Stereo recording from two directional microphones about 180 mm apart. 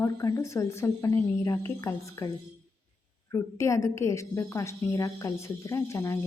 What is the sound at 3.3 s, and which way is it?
A woman's voice, 15° left (ahead or behind).